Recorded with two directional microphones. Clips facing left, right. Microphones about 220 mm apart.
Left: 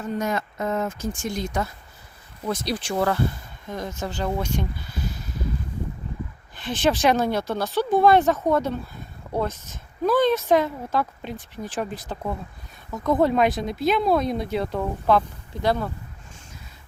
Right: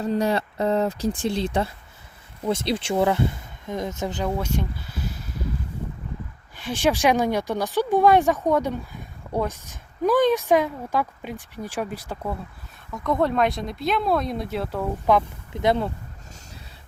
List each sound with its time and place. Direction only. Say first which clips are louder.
0.0 s speech: right 4 dB; 35° right (ahead or behind)
4.3 s speech: even; 5° right (ahead or behind)
6.6 s speech: even; 10° right (ahead or behind)
12.9 s speech: left 2 dB; centre (ahead or behind)
15.6 s speech: right 2 dB; 25° right (ahead or behind)